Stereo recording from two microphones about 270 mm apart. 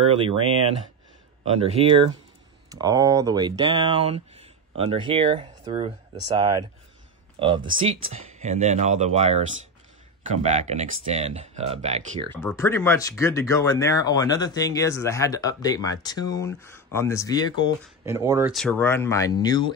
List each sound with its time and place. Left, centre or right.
0.0 s speech: centre
12.3 s speech: centre
18.0 s speech: centre
18.5 s speech: centre